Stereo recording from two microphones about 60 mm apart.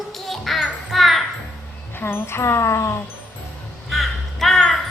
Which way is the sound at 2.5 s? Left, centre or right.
Left.